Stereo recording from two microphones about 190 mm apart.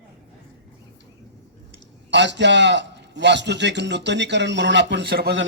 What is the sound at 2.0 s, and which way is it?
A man's voice, 65° right (ahead or behind).